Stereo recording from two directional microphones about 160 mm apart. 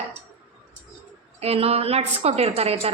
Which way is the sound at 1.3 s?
40° right (ahead or behind).